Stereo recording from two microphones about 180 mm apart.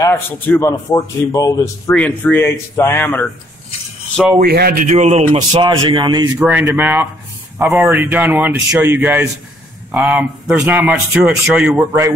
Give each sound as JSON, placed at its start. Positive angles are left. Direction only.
{"t": 0.0, "sound": "a man's voice", "side_deg": 15}
{"t": 4.4, "sound": "speech", "side_deg": -55}
{"t": 6.4, "sound": "speech", "side_deg": -10}
{"t": 10.5, "sound": "speech", "side_deg": -10}